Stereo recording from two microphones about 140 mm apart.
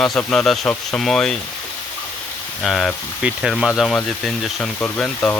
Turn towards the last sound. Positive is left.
turn(degrees=5)  # may be behind; listen again after turning